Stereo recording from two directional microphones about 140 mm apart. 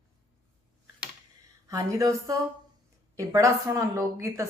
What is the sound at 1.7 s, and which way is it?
A woman's voice, 25° right (ahead or behind).